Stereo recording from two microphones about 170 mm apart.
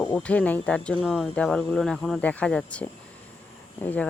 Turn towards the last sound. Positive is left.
turn(degrees=10)  # may be behind; listen again after turning